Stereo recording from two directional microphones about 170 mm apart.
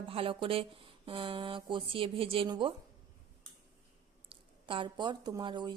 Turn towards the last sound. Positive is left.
turn(degrees=-25)  # may be behind; listen again after turning